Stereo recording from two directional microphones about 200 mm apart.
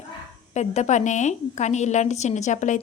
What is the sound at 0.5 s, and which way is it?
A woman's voice, 35° left (ahead or behind).